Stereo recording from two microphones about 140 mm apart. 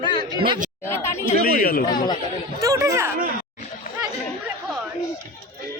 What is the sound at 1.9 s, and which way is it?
Speech, 30° left (ahead or behind).